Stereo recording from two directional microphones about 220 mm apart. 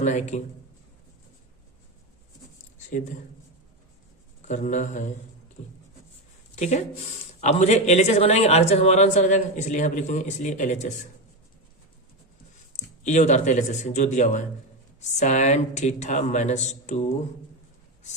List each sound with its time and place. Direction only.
0.0 s a man's voice: 35° left (ahead or behind)
4.4 s a man's voice: 35° left (ahead or behind)
6.6 s a man's voice: 30° left (ahead or behind)
12.7 s a man's voice: 35° left (ahead or behind)